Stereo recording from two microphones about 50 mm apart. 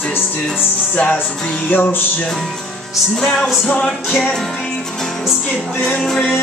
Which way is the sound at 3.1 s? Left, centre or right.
Centre.